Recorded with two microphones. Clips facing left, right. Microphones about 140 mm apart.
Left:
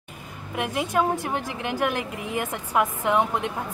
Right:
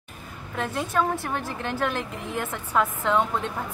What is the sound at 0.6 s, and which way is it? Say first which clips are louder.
A woman's voice: left 2 dB; 15° left (ahead or behind).